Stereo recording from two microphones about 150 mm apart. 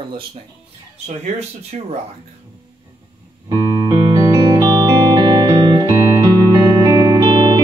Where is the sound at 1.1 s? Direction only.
45° right (ahead or behind).